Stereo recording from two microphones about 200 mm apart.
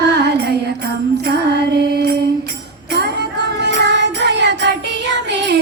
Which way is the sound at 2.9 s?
55° right (ahead or behind).